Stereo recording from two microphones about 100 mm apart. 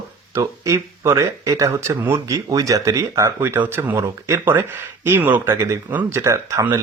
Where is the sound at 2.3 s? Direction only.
35° right (ahead or behind).